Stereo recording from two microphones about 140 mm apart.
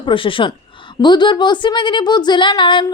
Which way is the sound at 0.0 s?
40° left (ahead or behind).